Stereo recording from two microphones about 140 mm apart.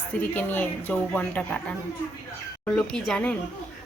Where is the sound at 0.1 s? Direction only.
15° left (ahead or behind).